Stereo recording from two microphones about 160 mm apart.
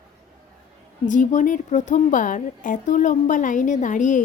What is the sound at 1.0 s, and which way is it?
A woman's voice, 50° left (ahead or behind).